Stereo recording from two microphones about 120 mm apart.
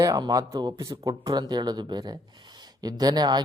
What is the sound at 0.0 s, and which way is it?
Speech, 30° right (ahead or behind).